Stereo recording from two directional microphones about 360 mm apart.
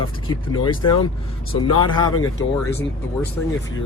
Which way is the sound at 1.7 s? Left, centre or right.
Centre.